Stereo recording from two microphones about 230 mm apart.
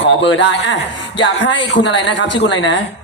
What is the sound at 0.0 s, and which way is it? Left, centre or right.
A woman's voice, left.